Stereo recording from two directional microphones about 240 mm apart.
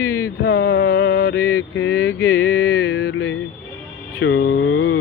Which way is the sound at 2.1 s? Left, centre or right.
Centre.